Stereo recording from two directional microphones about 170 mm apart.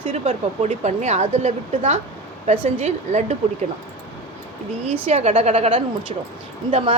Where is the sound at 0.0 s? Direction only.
35° right (ahead or behind).